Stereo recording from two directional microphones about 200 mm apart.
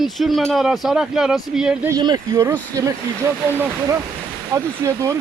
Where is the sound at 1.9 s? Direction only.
20° right (ahead or behind).